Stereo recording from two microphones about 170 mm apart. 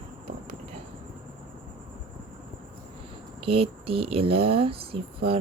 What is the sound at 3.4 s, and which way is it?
A woman's voice, 35° right (ahead or behind).